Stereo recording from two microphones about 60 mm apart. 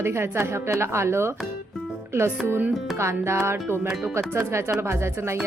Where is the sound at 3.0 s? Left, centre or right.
Right.